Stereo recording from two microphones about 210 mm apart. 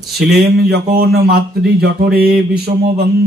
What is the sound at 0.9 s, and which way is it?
Speech, 45° right (ahead or behind).